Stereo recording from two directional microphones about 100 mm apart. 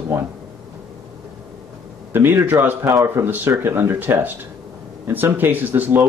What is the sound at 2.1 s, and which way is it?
Speech, 20° right (ahead or behind).